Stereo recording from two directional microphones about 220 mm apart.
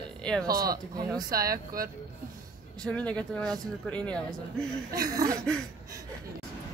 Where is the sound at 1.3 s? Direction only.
40° right (ahead or behind).